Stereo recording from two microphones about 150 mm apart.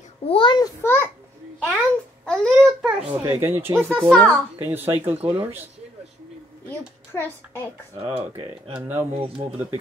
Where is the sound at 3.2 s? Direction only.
15° right (ahead or behind).